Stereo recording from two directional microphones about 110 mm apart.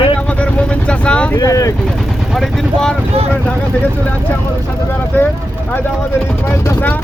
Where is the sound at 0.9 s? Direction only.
10° left (ahead or behind).